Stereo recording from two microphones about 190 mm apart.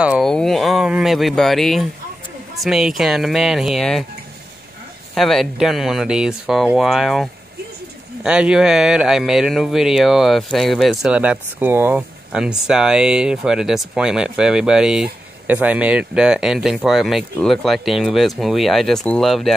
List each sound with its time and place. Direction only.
0.0 s speech: centre (ahead or behind)
5.1 s speech: centre (ahead or behind)